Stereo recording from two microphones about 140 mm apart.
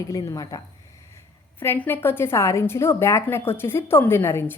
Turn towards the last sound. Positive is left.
turn(degrees=15)  # may be behind; listen again after turning